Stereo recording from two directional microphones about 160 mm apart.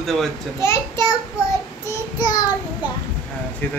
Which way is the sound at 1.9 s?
20° left (ahead or behind).